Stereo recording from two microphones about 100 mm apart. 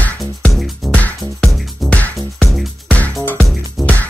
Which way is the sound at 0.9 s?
15° left (ahead or behind).